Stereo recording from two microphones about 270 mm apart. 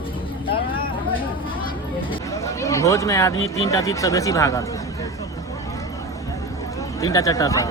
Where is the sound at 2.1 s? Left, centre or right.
Centre.